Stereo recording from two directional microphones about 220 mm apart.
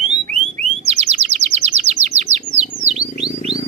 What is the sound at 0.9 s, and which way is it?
Chirp, 30° right (ahead or behind).